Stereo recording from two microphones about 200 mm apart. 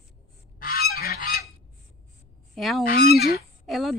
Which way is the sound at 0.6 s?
50° left (ahead or behind).